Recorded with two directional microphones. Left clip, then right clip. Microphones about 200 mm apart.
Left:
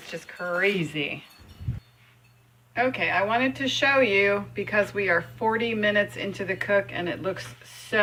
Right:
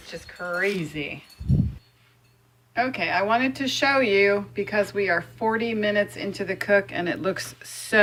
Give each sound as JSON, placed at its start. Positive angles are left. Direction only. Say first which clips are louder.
{"t": 0.0, "sound": "speech", "louder": "left 1 dB", "side_deg": 0}
{"t": 2.7, "sound": "speech", "louder": "even", "side_deg": -25}